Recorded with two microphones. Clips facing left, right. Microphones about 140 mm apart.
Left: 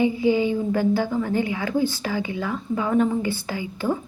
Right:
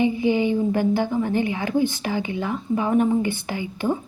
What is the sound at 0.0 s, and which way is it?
A woman's voice, 20° right (ahead or behind).